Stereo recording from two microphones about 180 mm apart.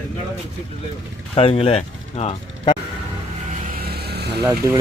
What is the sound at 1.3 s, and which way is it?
Speech, 35° left (ahead or behind).